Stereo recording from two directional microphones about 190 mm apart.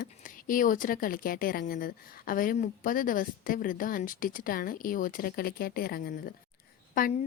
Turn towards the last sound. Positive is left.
turn(degrees=45)  # may be behind; listen again after turning